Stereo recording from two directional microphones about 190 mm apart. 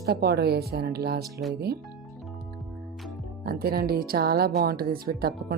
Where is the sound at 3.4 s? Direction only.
55° right (ahead or behind).